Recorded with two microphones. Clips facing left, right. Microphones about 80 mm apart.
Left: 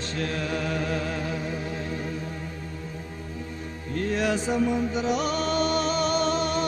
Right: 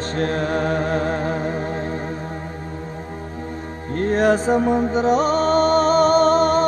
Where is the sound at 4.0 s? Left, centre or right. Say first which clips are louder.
Right 8 dB; right.